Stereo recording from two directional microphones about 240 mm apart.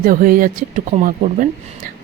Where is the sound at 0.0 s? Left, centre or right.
Right.